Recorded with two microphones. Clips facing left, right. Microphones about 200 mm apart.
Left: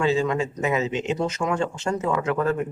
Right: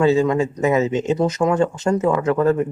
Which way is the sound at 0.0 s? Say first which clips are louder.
Right 6 dB; 40° right (ahead or behind).